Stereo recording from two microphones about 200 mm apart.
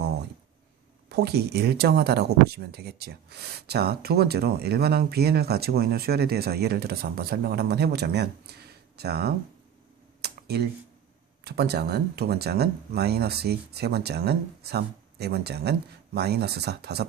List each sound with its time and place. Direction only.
1.1 s speech: 55° right (ahead or behind)
10.2 s a sound: 55° right (ahead or behind)
11.4 s speech: 55° right (ahead or behind)